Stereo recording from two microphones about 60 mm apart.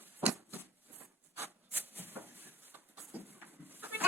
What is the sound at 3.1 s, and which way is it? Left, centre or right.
Goat, right.